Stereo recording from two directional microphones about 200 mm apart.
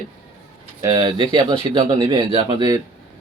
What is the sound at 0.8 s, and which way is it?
Speech, 20° right (ahead or behind).